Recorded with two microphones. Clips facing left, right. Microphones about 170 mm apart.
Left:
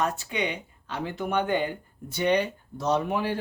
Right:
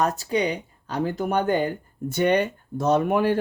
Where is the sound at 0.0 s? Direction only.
40° right (ahead or behind).